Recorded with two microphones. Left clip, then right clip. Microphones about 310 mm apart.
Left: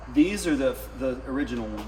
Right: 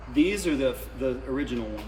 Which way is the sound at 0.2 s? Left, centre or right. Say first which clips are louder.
Left 1 dB; centre.